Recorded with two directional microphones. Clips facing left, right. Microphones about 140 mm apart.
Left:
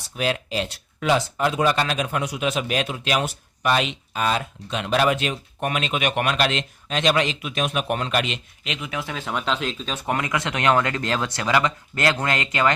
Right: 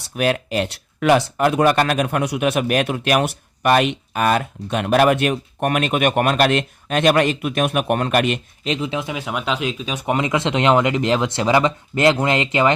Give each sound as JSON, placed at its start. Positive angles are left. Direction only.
{"t": 0.2, "sound": "speech", "side_deg": -60}
{"t": 8.6, "sound": "speech", "side_deg": -35}
{"t": 8.9, "sound": "speech", "side_deg": -20}